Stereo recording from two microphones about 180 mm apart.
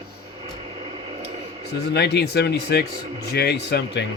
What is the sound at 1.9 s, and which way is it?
Speech, 65° left (ahead or behind).